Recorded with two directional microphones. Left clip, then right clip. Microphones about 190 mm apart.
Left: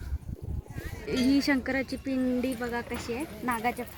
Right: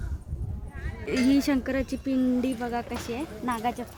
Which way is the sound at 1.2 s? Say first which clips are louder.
Right 2 dB; 15° right (ahead or behind).